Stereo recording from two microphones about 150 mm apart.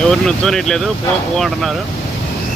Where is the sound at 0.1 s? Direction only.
5° left (ahead or behind).